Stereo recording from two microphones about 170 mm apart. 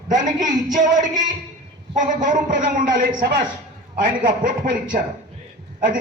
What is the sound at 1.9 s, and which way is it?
A man's voice, 50° right (ahead or behind).